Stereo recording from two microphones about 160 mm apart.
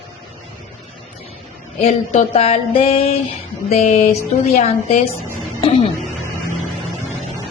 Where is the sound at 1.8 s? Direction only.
40° left (ahead or behind).